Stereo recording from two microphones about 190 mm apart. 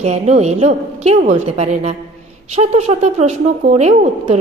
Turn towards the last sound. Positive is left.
turn(degrees=-35)  # may be behind; listen again after turning